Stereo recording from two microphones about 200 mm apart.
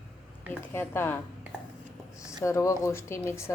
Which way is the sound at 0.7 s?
10° left (ahead or behind).